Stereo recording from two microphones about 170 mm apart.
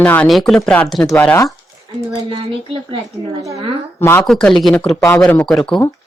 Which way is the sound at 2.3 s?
30° right (ahead or behind).